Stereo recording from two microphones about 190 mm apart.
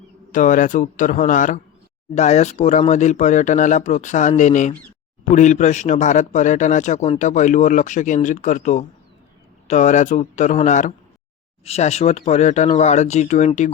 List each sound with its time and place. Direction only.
0.3 s speech: 40° left (ahead or behind)